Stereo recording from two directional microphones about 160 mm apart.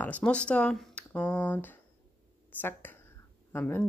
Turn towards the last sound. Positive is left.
turn(degrees=10)  # may be behind; listen again after turning